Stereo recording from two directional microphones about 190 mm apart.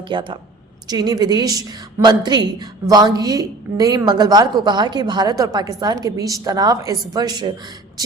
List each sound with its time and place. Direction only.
0.1 s a woman's voice: 25° right (ahead or behind)